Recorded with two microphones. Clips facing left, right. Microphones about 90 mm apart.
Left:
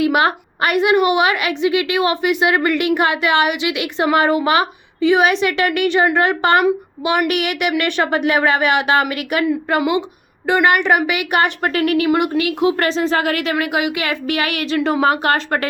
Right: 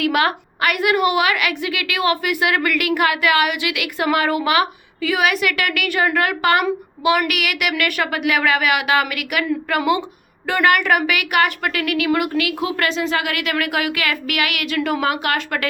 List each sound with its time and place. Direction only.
0.0 s a woman's voice: 25° left (ahead or behind)
14.8 s a woman's voice: 20° left (ahead or behind)
15.0 s a woman's voice: 35° left (ahead or behind)